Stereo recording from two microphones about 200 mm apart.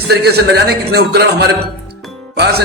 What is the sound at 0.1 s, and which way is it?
A man's voice, 55° right (ahead or behind).